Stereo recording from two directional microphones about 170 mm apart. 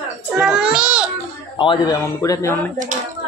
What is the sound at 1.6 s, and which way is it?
Speech, 30° left (ahead or behind).